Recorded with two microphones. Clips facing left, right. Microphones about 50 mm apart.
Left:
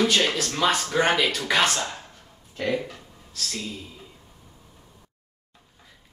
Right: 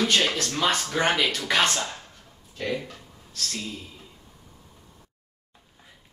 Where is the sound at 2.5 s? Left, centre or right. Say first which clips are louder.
Left 3 dB; centre.